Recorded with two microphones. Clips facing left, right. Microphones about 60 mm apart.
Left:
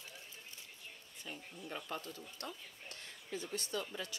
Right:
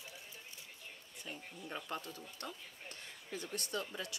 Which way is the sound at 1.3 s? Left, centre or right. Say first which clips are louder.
Even; centre.